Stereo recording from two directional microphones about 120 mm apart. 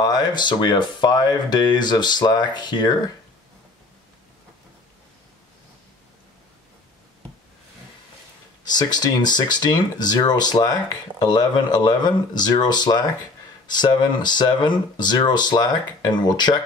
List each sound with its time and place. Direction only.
0.0 s speech: 35° left (ahead or behind)
8.6 s speech: 35° left (ahead or behind)